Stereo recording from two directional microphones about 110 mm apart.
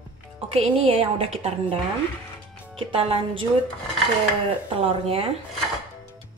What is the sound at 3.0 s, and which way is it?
Speech, 60° right (ahead or behind).